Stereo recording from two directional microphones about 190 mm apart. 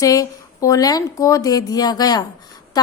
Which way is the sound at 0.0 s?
20° left (ahead or behind).